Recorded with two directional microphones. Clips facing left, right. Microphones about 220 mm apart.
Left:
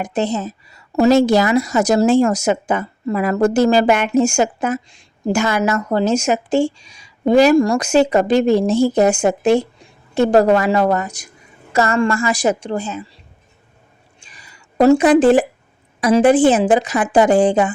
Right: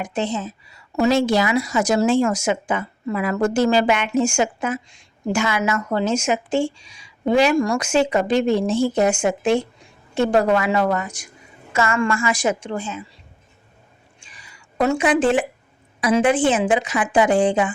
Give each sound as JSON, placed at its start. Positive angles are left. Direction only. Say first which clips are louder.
{"t": 0.0, "sound": "a woman's voice", "louder": "left 4 dB", "side_deg": 40}
{"t": 14.2, "sound": "a sound", "louder": "left 3 dB", "side_deg": 40}
{"t": 16.0, "sound": "a woman's voice", "louder": "left 5 dB", "side_deg": 40}